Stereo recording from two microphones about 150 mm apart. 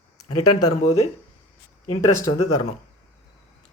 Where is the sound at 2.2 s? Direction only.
25° left (ahead or behind).